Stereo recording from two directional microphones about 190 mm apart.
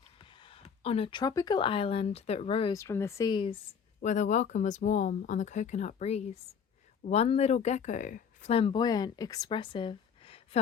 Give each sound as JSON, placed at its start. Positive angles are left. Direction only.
{"t": 0.2, "sound": "speech", "side_deg": 25}
{"t": 2.7, "sound": "speech", "side_deg": 15}
{"t": 4.0, "sound": "speech", "side_deg": 40}